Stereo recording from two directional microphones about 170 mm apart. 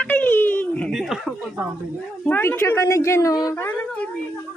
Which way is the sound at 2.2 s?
10° left (ahead or behind).